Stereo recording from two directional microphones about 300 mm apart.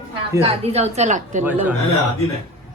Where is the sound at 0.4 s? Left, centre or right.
Centre.